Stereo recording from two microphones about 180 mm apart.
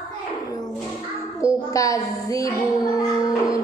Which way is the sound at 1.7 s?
20° left (ahead or behind).